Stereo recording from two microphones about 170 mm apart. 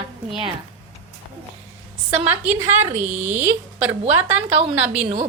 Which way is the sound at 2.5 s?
15° right (ahead or behind).